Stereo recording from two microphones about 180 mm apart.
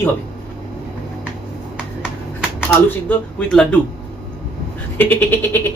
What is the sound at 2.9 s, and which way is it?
Speech, 5° left (ahead or behind).